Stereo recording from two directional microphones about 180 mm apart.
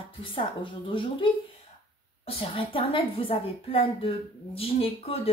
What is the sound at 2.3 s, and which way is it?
A woman's voice, 30° left (ahead or behind).